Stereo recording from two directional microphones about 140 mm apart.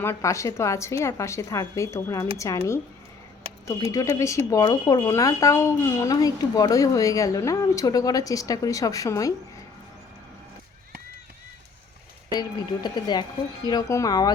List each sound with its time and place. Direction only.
0.0 s speech: 20° left (ahead or behind)
3.4 s a sound: 45° right (ahead or behind)
3.9 s speech: 20° left (ahead or behind)
12.3 s speech: 30° left (ahead or behind)